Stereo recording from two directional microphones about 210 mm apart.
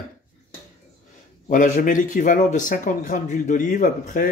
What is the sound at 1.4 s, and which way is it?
Speech, 35° left (ahead or behind).